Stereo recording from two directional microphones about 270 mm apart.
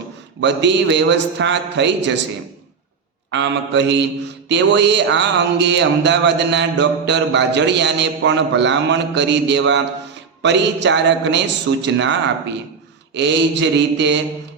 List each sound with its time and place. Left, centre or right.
0.3 s a man's voice: right
3.3 s a man's voice: right
13.1 s a man's voice: right